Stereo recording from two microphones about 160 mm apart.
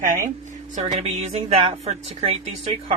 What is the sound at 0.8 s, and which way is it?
A woman's voice, 45° right (ahead or behind).